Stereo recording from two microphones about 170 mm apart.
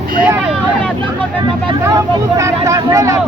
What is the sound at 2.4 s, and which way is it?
Speech, 20° right (ahead or behind).